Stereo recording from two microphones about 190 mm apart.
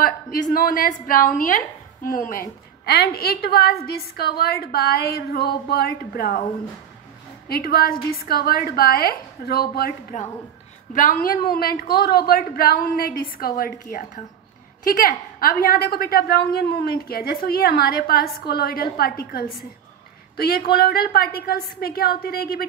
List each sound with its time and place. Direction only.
0.0 s a woman's voice: 50° left (ahead or behind)
7.4 s a woman's voice: 55° left (ahead or behind)